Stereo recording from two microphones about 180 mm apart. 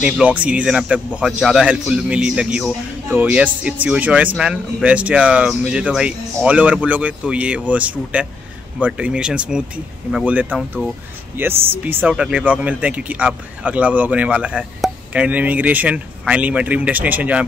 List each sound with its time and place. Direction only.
0.0 s speech: 5° right (ahead or behind)